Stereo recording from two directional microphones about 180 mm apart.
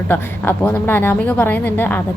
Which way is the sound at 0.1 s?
10° left (ahead or behind).